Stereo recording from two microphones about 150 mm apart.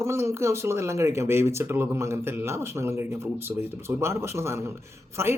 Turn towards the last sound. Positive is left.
turn(degrees=-15)  # may be behind; listen again after turning